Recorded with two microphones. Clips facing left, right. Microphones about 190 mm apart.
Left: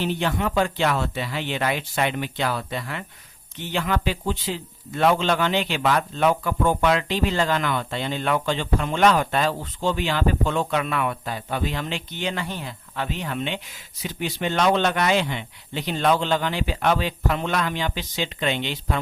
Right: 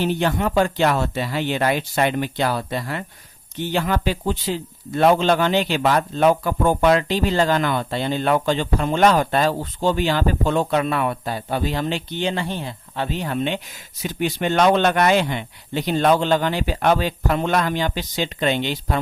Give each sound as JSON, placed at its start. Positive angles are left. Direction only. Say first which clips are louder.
{"t": 0.0, "sound": "a man's voice", "louder": "right 4 dB", "side_deg": -45}